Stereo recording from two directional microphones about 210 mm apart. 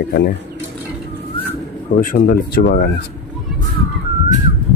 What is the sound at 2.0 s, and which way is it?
Speech, 40° left (ahead or behind).